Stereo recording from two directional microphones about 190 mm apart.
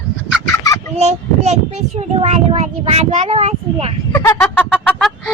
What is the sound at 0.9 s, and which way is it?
Child singing, 35° right (ahead or behind).